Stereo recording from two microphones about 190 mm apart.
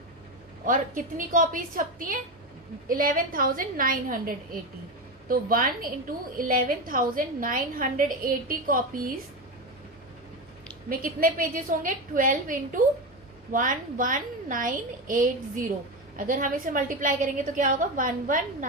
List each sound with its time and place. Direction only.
0.6 s a woman's voice: 45° right (ahead or behind)
10.8 s a woman's voice: 45° right (ahead or behind)